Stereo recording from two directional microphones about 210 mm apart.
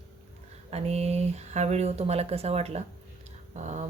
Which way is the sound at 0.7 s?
30° right (ahead or behind).